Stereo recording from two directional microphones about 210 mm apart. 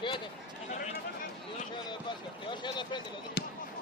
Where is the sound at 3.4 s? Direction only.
50° left (ahead or behind).